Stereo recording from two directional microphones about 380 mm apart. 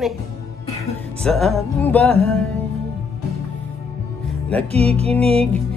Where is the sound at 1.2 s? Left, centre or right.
Centre.